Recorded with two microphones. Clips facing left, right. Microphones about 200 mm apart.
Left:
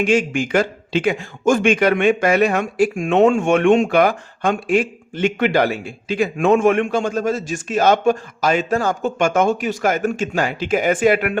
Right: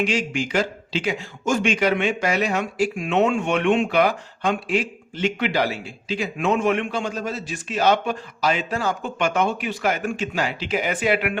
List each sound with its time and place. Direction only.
0.0 s a man's voice: 50° left (ahead or behind)